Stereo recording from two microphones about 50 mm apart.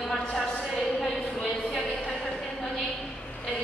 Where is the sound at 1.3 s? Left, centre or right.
Left.